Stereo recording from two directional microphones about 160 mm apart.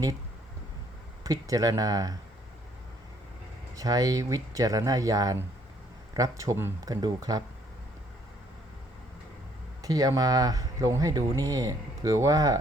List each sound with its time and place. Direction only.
1.2 s speech: 20° right (ahead or behind)
3.8 s speech: 20° right (ahead or behind)
9.8 s speech: 20° right (ahead or behind)